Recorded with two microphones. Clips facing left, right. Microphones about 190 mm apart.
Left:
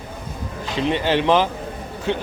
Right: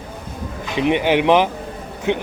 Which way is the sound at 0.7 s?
15° right (ahead or behind).